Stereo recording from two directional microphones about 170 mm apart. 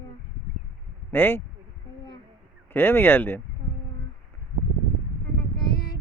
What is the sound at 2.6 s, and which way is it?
Speech, 10° left (ahead or behind).